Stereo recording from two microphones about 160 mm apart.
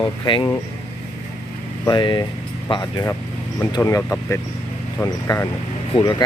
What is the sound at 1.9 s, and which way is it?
Speech, 30° left (ahead or behind).